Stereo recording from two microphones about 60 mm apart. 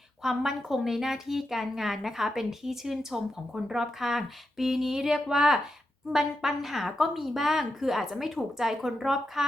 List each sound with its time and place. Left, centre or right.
0.2 s speech: centre